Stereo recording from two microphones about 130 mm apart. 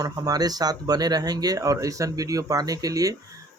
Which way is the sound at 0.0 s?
30° right (ahead or behind).